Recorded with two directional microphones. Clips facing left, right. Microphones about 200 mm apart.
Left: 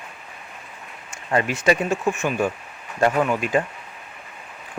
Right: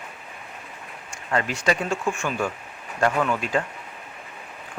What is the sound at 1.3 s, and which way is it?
Speech, 20° left (ahead or behind).